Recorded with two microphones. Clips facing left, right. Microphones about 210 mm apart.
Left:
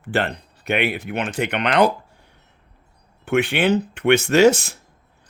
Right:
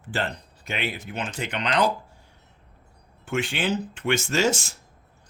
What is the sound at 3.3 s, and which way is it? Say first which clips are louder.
Speech: left 8 dB; 60° left (ahead or behind).